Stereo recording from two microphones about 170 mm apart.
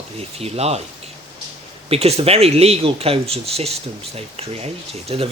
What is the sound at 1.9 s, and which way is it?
Speech, 35° right (ahead or behind).